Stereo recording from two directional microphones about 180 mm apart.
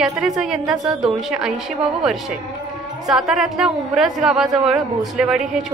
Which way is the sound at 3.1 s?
5° right (ahead or behind).